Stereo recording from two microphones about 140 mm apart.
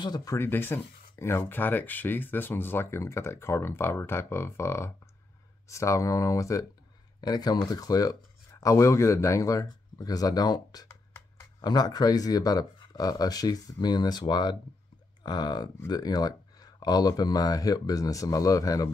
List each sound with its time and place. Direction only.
0.0 s speech: 25° left (ahead or behind)